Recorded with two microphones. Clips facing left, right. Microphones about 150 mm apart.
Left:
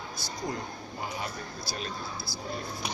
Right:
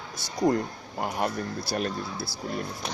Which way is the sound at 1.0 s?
60° right (ahead or behind).